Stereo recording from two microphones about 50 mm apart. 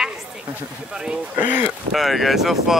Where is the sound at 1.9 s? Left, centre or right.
Centre.